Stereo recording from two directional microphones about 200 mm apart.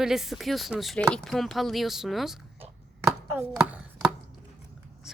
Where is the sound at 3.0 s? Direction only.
10° right (ahead or behind).